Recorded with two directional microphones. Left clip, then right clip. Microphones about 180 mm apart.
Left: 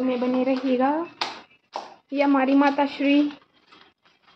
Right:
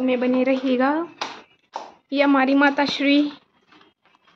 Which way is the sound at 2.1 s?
15° right (ahead or behind).